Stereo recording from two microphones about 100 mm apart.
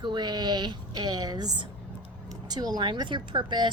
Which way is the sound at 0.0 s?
45° right (ahead or behind).